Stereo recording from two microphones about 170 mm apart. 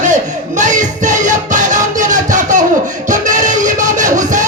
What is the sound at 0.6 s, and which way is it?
Music, 45° right (ahead or behind).